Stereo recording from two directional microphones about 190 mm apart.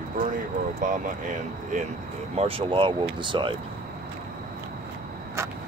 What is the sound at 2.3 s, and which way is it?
Speech, 30° right (ahead or behind).